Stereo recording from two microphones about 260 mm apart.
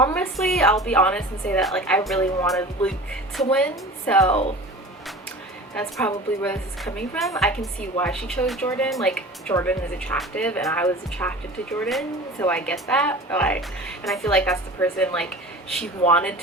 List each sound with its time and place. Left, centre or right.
0.0 s a woman's voice: centre
4.3 s speech: left
6.0 s a woman's voice: centre